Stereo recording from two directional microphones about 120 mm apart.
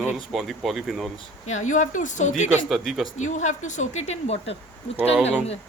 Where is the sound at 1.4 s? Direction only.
85° left.